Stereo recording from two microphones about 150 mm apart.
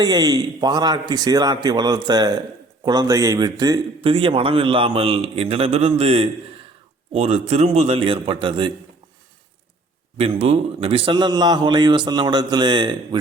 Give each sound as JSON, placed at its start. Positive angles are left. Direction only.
{"t": 0.0, "sound": "speech", "side_deg": -25}
{"t": 4.0, "sound": "a man's voice", "side_deg": -35}
{"t": 10.2, "sound": "speech", "side_deg": -40}